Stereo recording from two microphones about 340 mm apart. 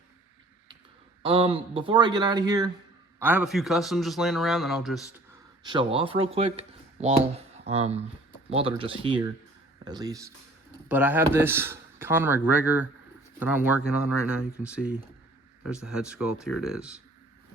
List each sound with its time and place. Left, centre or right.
1.2 s speech: centre
5.6 s speech: centre